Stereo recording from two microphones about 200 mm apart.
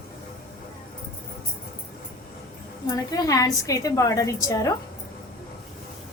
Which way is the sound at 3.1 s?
20° left (ahead or behind).